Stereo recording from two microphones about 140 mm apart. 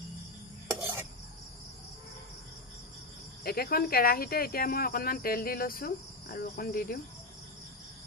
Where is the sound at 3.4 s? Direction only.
90° left.